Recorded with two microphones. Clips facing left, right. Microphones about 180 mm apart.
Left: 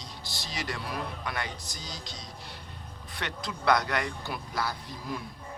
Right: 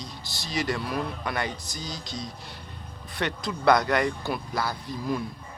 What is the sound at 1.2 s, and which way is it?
Speech, 50° right (ahead or behind).